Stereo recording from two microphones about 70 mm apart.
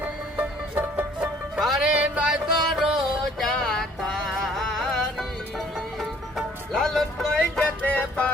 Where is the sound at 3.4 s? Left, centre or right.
Centre.